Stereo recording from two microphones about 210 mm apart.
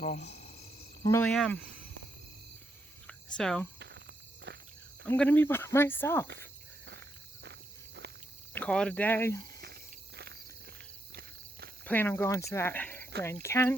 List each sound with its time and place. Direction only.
0.0 s cricket: 30° left (ahead or behind)
1.1 s speech: 5° left (ahead or behind)
3.1 s a sound: 5° left (ahead or behind)
3.8 s a sound: 55° right (ahead or behind)
4.5 s insect: 50° right (ahead or behind)
5.0 s speech: 5° left (ahead or behind)
8.5 s speech: 5° left (ahead or behind)
9.6 s walk: 50° right (ahead or behind)
11.9 s speech: 10° left (ahead or behind)